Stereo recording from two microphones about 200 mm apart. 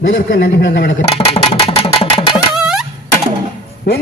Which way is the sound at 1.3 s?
30° left (ahead or behind).